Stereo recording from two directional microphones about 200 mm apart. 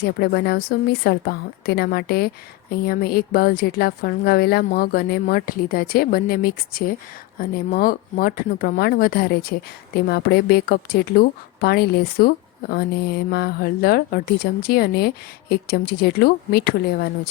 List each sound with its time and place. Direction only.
0.0 s a woman's voice: 50° left (ahead or behind)